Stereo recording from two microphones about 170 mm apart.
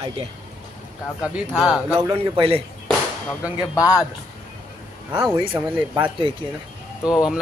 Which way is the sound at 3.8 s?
20° left (ahead or behind).